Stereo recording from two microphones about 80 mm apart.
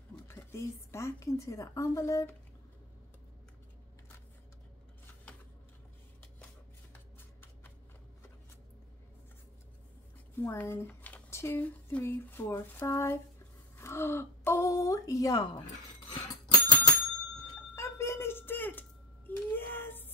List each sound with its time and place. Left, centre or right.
0.5 s a woman's voice: left
6.9 s shuffling cards: left
10.3 s speech: left
11.2 s a sound: left
12.1 s a woman's voice: left
16.1 s bicycle bell: left
17.7 s a sound: left